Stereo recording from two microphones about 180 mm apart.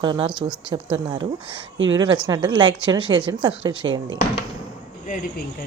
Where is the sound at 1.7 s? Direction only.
90° right.